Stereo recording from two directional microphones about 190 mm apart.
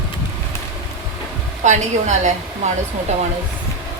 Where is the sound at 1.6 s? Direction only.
40° right (ahead or behind).